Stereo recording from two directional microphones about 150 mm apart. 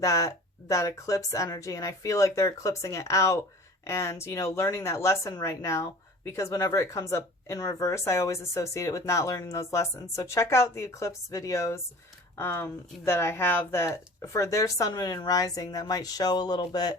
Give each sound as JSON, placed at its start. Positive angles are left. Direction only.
{"t": 0.0, "sound": "speech", "side_deg": 20}